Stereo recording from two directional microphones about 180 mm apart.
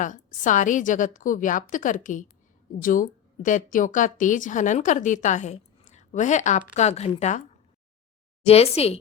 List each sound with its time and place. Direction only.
0.0 s speech: 45° left (ahead or behind)
8.4 s speech: 35° left (ahead or behind)